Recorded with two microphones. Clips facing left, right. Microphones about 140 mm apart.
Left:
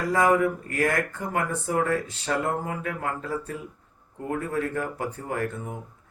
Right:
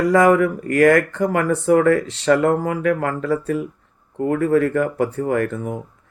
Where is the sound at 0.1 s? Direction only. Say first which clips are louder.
Right 5 dB; 85° right.